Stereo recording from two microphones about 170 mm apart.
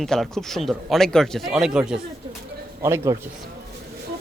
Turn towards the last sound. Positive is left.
turn(degrees=-15)  # may be behind; listen again after turning